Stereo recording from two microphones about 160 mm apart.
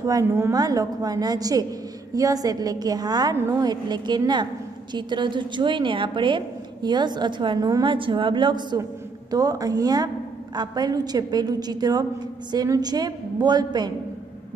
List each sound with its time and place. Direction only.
0.0 s a woman's voice: 15° right (ahead or behind)